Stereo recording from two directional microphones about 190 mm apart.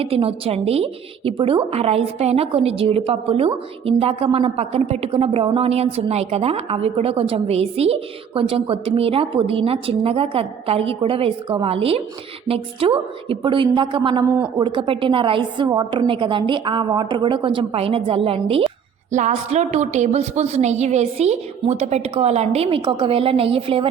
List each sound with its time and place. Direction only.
0.0 s a woman's voice: 30° right (ahead or behind)